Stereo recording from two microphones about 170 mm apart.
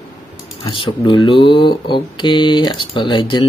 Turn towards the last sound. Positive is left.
turn(degrees=30)  # may be behind; listen again after turning